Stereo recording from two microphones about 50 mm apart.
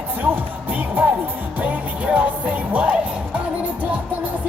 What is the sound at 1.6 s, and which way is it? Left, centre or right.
Music, right.